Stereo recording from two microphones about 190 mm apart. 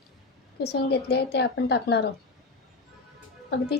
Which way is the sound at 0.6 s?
60° left (ahead or behind).